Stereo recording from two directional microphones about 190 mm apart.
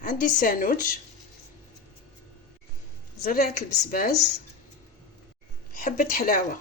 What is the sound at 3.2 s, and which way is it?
Speech, 45° left (ahead or behind).